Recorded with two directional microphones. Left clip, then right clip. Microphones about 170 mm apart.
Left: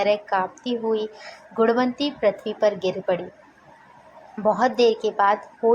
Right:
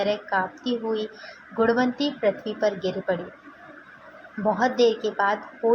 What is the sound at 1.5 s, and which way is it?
A woman's voice, 35° left (ahead or behind).